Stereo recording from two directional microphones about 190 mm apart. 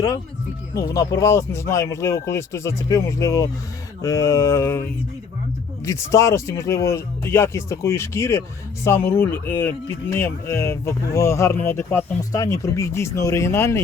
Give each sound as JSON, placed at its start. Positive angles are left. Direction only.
{"t": 0.7, "sound": "speech", "side_deg": 15}